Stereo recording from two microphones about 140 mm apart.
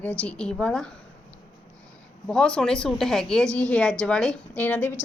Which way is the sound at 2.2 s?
5° left (ahead or behind).